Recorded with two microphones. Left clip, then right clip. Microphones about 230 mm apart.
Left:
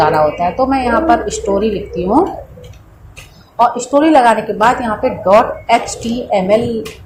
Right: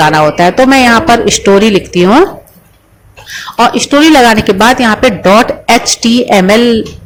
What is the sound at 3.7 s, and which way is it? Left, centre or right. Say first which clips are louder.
A woman's voice: right 6 dB; right.